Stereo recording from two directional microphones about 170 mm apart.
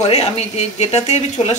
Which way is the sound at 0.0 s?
40° left (ahead or behind).